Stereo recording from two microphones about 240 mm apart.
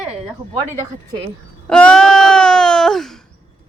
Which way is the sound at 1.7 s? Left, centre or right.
Centre.